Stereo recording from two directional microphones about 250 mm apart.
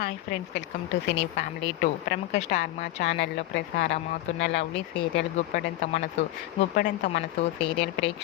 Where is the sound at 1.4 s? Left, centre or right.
Left.